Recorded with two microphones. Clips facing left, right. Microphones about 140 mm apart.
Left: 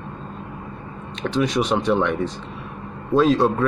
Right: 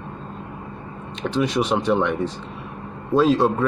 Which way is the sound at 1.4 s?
10° right (ahead or behind).